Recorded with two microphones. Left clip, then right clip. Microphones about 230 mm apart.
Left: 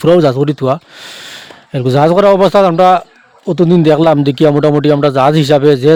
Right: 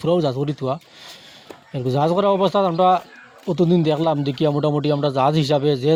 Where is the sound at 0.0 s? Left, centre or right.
Left.